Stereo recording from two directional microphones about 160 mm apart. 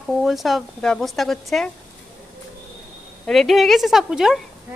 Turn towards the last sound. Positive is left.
turn(degrees=-5)  # may be behind; listen again after turning